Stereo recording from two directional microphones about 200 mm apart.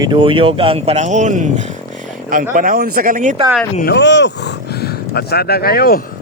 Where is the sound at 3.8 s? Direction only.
55° left (ahead or behind).